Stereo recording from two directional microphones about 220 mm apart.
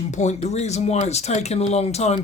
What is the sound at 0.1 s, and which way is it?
Speech, 30° left (ahead or behind).